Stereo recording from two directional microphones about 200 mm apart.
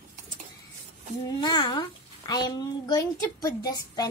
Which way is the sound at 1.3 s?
20° left (ahead or behind).